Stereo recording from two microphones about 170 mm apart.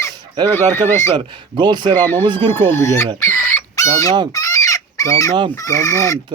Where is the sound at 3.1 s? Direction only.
15° left (ahead or behind).